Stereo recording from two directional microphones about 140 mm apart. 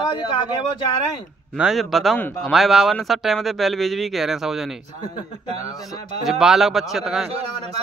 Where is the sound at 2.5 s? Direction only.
Centre (ahead or behind).